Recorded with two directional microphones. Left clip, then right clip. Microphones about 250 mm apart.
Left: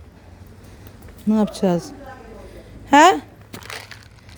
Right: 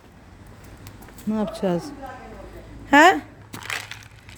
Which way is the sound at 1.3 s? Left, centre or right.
Left.